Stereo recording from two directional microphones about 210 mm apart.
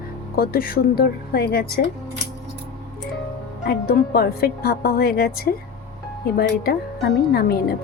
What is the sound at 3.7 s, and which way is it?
A woman's voice, 45° left (ahead or behind).